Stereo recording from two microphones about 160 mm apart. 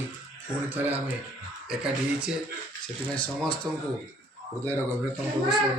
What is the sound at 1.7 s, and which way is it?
Speech, 5° right (ahead or behind).